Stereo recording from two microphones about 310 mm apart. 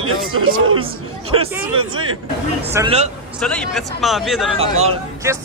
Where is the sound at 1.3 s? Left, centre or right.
Centre.